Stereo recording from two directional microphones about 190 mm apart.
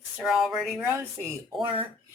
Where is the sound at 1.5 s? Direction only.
25° right (ahead or behind).